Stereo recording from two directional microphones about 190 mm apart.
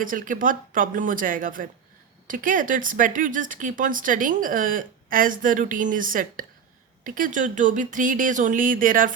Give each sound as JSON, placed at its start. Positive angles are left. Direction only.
{"t": 0.0, "sound": "speech", "side_deg": -45}